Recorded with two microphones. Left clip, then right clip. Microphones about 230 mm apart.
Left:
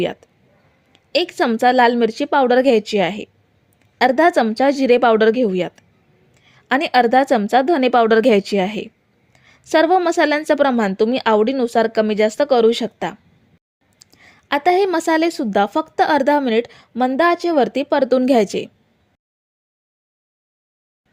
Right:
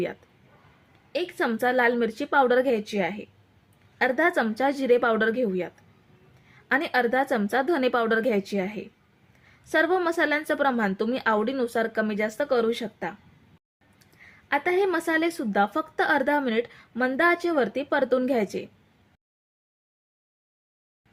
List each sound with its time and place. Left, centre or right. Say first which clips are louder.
1.1 s a woman's voice: left 9 dB; left